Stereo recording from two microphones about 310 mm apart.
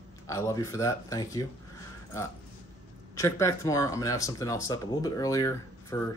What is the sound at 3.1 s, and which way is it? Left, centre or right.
Speech, centre.